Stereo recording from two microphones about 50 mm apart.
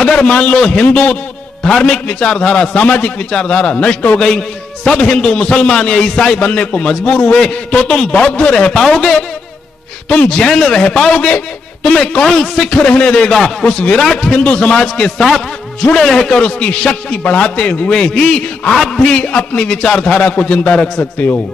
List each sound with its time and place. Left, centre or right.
0.0 s a man's voice: centre
4.2 s a man's voice: centre
8.7 s a man's voice: centre
10.0 s a man's voice: left
12.7 s a man's voice: left
15.1 s a man's voice: centre
16.3 s a man's voice: left